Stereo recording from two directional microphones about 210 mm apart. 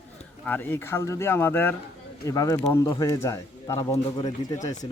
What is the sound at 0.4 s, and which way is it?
Speech, 10° left (ahead or behind).